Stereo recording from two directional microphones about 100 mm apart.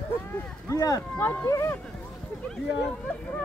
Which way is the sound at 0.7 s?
35° left (ahead or behind).